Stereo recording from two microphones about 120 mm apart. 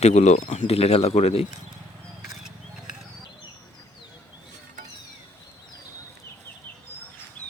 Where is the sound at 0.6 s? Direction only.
60° left (ahead or behind).